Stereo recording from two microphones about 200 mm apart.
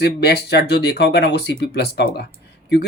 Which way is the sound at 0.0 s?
55° left (ahead or behind).